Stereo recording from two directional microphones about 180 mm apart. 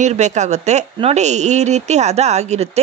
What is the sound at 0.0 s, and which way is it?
Speech, 40° right (ahead or behind).